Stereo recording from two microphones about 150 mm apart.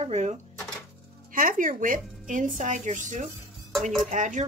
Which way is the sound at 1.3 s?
65° right (ahead or behind).